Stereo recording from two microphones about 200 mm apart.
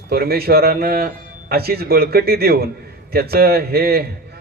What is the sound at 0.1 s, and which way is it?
A man's voice, 50° right (ahead or behind).